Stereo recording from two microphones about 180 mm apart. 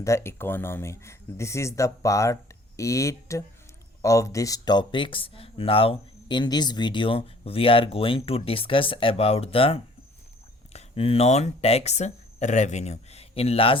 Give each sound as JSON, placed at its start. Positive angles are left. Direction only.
{"t": 0.0, "sound": "speech", "side_deg": 15}